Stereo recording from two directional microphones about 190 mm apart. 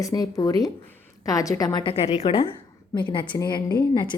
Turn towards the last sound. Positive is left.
turn(degrees=25)  # may be behind; listen again after turning